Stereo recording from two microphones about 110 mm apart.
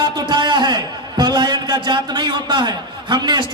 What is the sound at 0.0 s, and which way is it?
A man's voice, 40° right (ahead or behind).